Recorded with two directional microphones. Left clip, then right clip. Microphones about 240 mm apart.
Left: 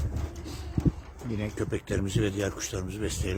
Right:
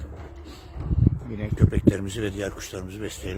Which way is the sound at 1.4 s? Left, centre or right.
Centre.